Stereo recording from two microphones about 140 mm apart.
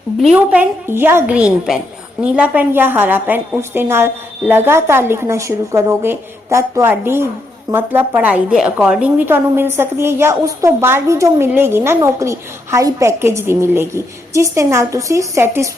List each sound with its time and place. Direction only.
0.3 s a woman's voice: 10° right (ahead or behind)